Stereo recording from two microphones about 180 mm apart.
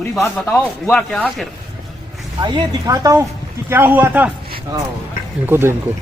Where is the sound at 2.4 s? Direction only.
25° right (ahead or behind).